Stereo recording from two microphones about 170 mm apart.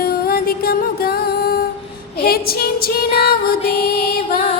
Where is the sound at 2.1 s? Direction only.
60° left (ahead or behind).